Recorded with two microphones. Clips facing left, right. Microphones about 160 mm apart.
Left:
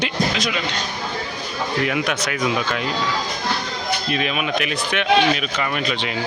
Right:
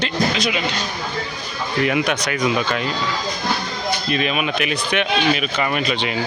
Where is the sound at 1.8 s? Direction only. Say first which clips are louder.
Right 2 dB; centre (ahead or behind).